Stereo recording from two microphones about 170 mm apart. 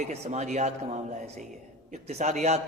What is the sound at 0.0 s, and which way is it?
A man's voice, 40° right (ahead or behind).